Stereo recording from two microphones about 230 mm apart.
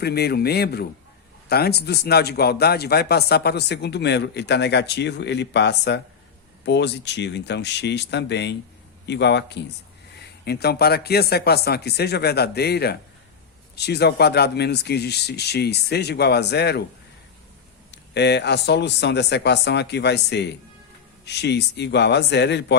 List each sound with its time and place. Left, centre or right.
0.0 s speech: left
17.9 s speech: left